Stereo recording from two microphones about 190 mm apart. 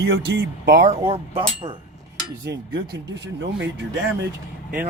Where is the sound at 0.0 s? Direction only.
65° right (ahead or behind).